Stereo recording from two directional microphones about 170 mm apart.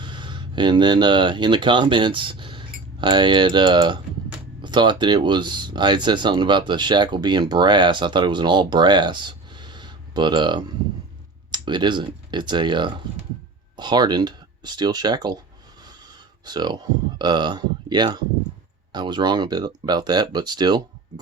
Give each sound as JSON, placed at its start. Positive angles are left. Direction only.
{"t": 0.0, "sound": "speech", "side_deg": -30}
{"t": 16.4, "sound": "speech", "side_deg": -25}